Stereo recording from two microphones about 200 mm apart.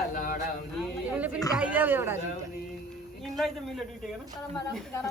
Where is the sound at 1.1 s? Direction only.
10° right (ahead or behind).